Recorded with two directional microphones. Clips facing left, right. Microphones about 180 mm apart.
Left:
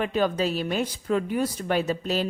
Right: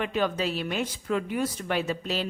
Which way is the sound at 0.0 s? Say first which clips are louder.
Left 3 dB; 40° left (ahead or behind).